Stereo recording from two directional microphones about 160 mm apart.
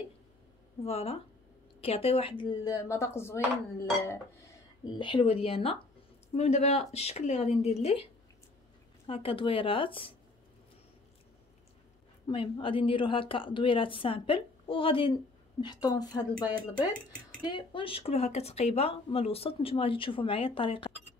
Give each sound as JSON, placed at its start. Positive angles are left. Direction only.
{"t": 0.8, "sound": "a woman's voice", "side_deg": 40}
{"t": 3.7, "sound": "a sound", "side_deg": 15}
{"t": 4.9, "sound": "speech", "side_deg": 30}
{"t": 12.3, "sound": "a woman's voice", "side_deg": 30}
{"t": 17.5, "sound": "speech", "side_deg": 30}